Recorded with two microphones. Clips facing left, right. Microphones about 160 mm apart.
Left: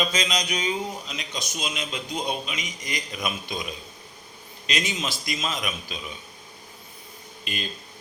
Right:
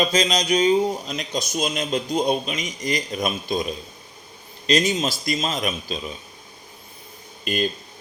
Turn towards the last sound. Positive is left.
turn(degrees=-50)  # may be behind; listen again after turning